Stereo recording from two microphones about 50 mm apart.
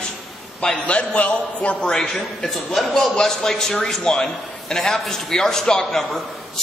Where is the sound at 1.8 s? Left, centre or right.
Centre.